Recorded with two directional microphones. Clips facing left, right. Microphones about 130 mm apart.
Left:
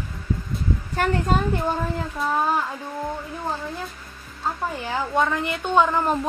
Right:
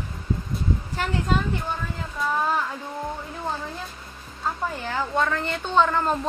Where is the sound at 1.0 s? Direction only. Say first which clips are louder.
Left 7 dB; 50° left (ahead or behind).